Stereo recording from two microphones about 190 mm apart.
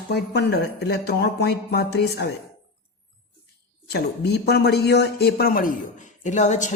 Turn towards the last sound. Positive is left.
turn(degrees=40)  # may be behind; listen again after turning